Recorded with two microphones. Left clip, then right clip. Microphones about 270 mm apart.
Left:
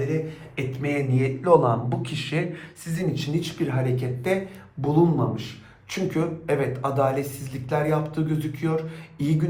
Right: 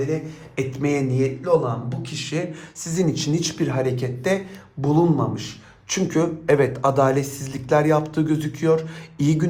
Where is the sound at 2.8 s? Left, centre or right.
Right.